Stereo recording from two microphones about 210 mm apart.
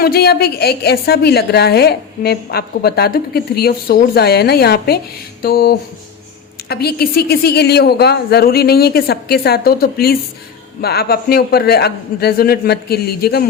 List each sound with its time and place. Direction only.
0.0 s a woman's voice: 50° left (ahead or behind)
5.4 s a sound: 45° left (ahead or behind)
6.7 s a woman's voice: 50° left (ahead or behind)